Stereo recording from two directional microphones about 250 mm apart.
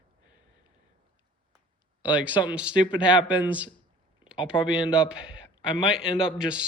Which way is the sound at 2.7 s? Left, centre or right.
Centre.